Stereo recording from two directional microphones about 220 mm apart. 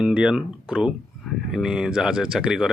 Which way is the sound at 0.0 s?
5° right (ahead or behind).